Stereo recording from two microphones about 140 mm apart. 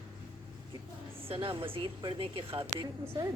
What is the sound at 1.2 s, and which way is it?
A woman's voice, 40° right (ahead or behind).